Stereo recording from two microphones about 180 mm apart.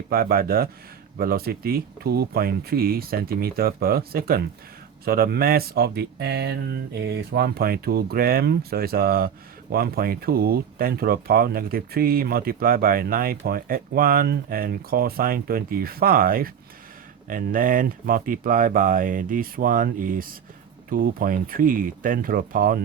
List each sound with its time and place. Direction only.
0.1 s speech: 55° right (ahead or behind)